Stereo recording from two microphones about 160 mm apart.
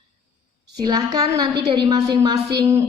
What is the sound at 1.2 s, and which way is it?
A woman's voice, 25° right (ahead or behind).